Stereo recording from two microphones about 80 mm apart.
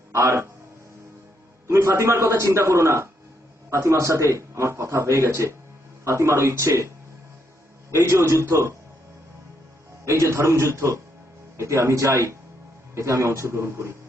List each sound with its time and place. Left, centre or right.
0.1 s speech: right
1.6 s a man's voice: right
10.1 s a man's voice: right